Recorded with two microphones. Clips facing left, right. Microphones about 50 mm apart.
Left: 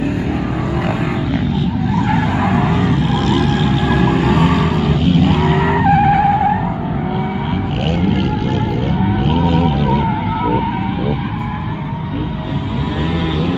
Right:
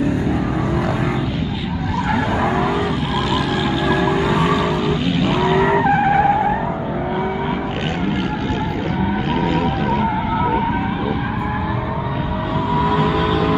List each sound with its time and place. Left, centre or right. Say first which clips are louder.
0.0 s a sound: even; left
0.4 s vehicle: even; centre
2.7 s vehicle: left 3 dB; centre
10.0 s skidding: left 1 dB; centre